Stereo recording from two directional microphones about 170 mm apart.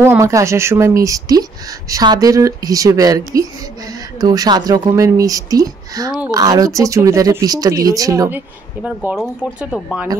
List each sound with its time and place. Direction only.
0.0 s speech: 15° right (ahead or behind)
8.8 s speech: 5° right (ahead or behind)